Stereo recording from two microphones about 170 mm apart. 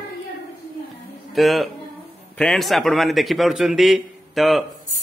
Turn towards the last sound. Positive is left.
turn(degrees=0)  # may be behind; listen again after turning